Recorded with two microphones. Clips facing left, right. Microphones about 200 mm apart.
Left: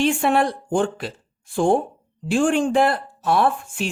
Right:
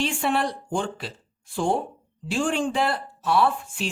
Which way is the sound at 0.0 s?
50° left (ahead or behind).